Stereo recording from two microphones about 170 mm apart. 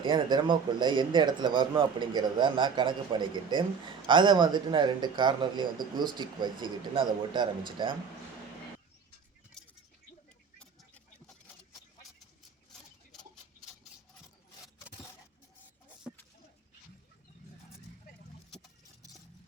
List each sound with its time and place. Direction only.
0.0 s speech: 25° right (ahead or behind)
9.6 s keys jangling: 5° left (ahead or behind)
10.6 s a sound: 5° left (ahead or behind)